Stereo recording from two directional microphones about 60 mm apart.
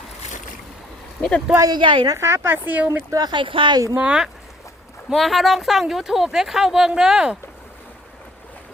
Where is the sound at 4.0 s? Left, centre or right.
Centre.